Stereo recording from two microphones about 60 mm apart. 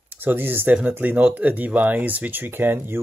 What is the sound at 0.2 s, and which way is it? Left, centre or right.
Speech, right.